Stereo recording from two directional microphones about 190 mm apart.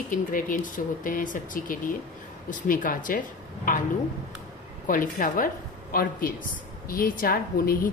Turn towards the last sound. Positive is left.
turn(degrees=50)  # may be behind; listen again after turning